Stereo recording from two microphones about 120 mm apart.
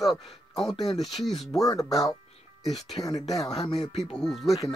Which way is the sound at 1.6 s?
30° left (ahead or behind).